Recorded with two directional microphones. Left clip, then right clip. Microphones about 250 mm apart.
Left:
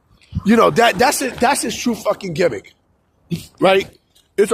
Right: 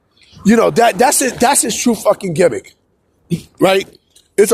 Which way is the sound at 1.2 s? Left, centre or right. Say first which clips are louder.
Right 3 dB; right.